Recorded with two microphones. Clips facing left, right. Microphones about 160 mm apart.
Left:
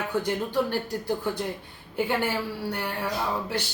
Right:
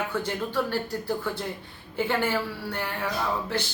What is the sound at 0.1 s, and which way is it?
Speech, 15° left (ahead or behind).